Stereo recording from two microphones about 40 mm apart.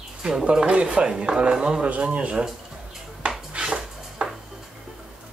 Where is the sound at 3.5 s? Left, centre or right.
Centre.